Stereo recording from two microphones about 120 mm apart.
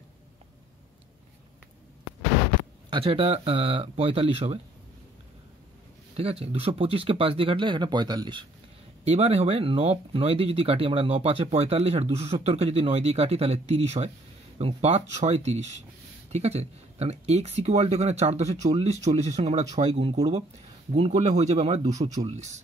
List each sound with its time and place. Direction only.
2.9 s speech: 50° right (ahead or behind)
6.4 s speech: 55° right (ahead or behind); by 8.5 s 40° right (ahead or behind)
9.0 s speech: 60° right (ahead or behind)